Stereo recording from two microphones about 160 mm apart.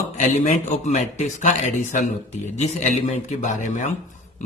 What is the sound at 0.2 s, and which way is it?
A man's voice, 50° left (ahead or behind).